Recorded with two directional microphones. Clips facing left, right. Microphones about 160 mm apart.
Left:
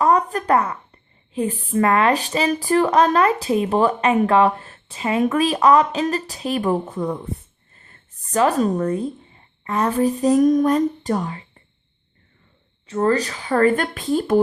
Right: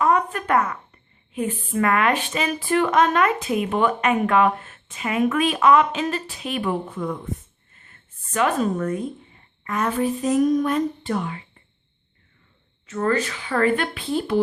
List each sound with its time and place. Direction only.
0.0 s a woman's voice: 35° left (ahead or behind)
12.9 s a woman's voice: 35° left (ahead or behind)